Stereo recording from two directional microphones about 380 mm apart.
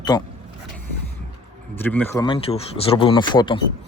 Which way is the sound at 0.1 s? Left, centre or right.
Centre.